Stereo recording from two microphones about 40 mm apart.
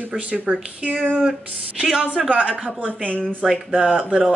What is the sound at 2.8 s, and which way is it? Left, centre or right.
Speech, left.